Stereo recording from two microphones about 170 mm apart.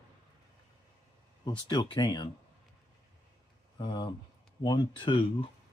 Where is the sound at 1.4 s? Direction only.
25° left (ahead or behind).